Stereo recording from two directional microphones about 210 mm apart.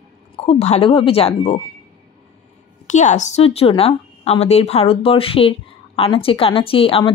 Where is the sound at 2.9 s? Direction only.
35° left (ahead or behind).